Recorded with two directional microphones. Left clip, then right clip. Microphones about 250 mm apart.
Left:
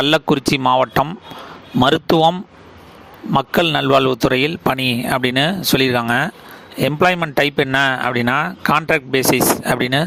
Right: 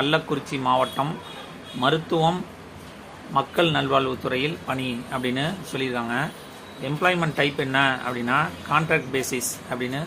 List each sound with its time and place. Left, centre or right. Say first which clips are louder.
0.0 s speech: left 8 dB; left